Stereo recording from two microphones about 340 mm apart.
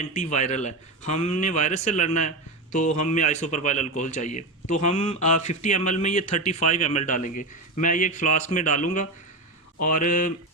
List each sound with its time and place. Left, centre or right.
0.0 s speech: left